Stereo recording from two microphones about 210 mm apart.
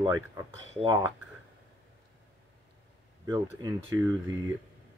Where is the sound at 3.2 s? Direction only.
20° right (ahead or behind).